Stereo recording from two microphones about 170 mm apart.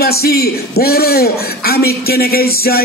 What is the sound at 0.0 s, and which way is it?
A man's voice, 65° left (ahead or behind).